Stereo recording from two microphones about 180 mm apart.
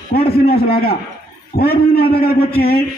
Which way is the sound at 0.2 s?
30° left (ahead or behind).